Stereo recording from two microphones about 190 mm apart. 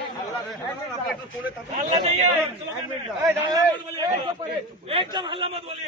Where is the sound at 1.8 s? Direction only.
35° right (ahead or behind).